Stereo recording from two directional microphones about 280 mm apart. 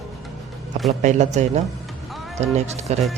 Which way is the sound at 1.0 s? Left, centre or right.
Right.